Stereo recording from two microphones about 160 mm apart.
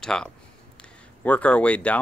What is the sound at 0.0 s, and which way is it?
Speech, 5° left (ahead or behind).